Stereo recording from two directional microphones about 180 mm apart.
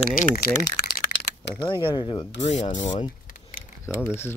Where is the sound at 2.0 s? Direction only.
25° left (ahead or behind).